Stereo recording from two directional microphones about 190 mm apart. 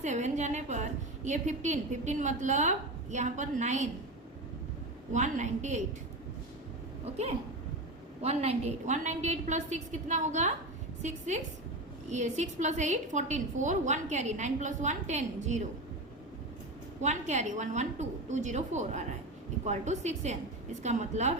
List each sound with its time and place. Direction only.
0.0 s a woman's voice: 40° right (ahead or behind)
5.1 s a woman's voice: 40° right (ahead or behind)
7.0 s a woman's voice: 35° right (ahead or behind)
17.0 s a woman's voice: 40° right (ahead or behind)